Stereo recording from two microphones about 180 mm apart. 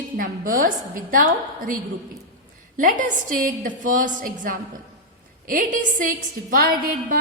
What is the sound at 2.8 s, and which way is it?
A woman's voice, 45° right (ahead or behind).